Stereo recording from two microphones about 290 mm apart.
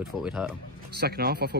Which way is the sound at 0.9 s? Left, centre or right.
Right.